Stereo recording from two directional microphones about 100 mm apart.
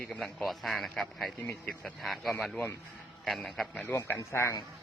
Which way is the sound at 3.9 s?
20° left (ahead or behind).